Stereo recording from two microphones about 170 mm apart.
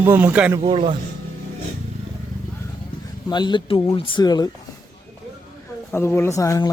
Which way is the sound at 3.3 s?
25° left (ahead or behind).